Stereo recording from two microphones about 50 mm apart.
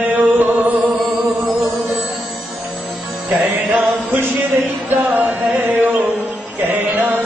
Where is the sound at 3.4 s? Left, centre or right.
Right.